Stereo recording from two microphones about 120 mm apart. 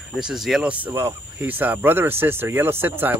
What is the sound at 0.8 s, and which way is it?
Speech, 20° right (ahead or behind).